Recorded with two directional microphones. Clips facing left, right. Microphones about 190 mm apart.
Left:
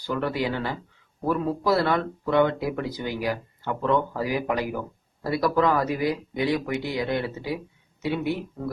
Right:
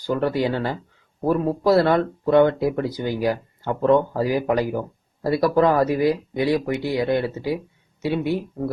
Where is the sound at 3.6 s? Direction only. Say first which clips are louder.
Right 7 dB; 45° right (ahead or behind).